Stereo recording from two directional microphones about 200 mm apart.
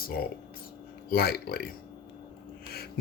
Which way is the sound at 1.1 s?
50° left (ahead or behind).